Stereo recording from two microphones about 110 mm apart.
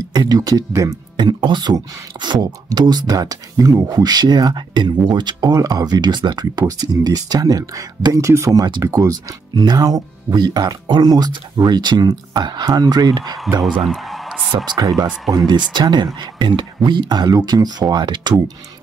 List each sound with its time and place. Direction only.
0.1 s speech: 35° right (ahead or behind)
1.1 s speech: 45° right (ahead or behind)
13.8 s music: centre (ahead or behind)
14.7 s speech: 35° right (ahead or behind)